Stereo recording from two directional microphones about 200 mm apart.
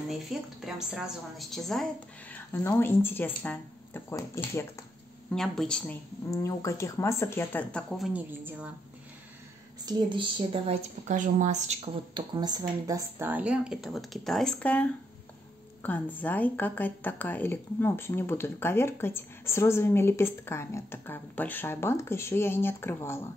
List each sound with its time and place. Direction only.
0.1 s a woman's voice: centre (ahead or behind)
5.3 s a woman's voice: 5° left (ahead or behind)
6.3 s a woman's voice: 15° left (ahead or behind)
8.1 s speech: 10° right (ahead or behind)
9.8 s a woman's voice: 20° right (ahead or behind); by 23.2 s 10° left (ahead or behind)